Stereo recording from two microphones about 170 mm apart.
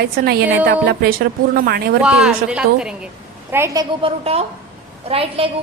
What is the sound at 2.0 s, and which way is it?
A woman's voice, 5° right (ahead or behind).